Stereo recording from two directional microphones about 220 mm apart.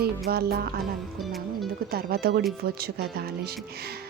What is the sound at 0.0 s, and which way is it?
Speech, 45° right (ahead or behind).